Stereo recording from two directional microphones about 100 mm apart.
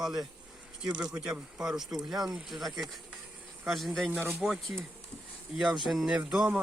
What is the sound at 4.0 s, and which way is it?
Speech, 15° right (ahead or behind).